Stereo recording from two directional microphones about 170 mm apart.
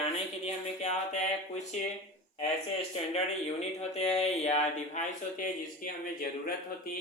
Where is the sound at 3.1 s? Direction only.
40° left (ahead or behind).